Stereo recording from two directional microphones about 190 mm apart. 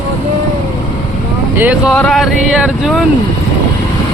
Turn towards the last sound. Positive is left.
turn(degrees=0)  # may be behind; listen again after turning